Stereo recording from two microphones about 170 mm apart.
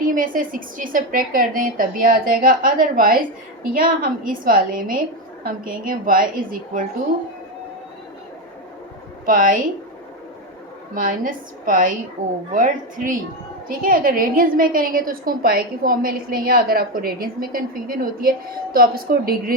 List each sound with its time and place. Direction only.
0.0 s a woman's voice: 55° right (ahead or behind)
9.2 s a woman's voice: 55° right (ahead or behind)
10.9 s a woman's voice: 55° right (ahead or behind)